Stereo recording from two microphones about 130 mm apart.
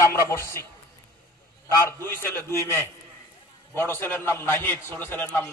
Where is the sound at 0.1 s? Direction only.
20° left (ahead or behind).